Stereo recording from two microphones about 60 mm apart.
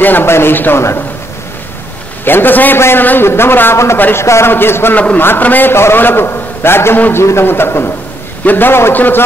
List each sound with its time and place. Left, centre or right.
0.0 s speech: left
2.2 s speech: left
3.7 s speech: left
4.9 s a man's voice: left